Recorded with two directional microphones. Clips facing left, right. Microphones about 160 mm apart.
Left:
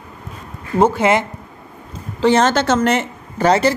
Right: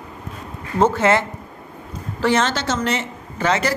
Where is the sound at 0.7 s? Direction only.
15° left (ahead or behind).